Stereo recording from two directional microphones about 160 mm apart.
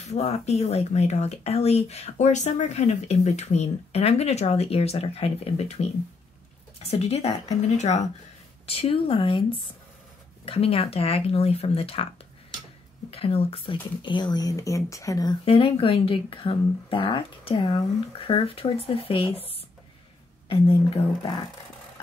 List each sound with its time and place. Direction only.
0.0 s speech: 40° left (ahead or behind)
13.1 s speech: 40° left (ahead or behind); by 15.3 s 20° left (ahead or behind)
15.4 s speech: 35° left (ahead or behind)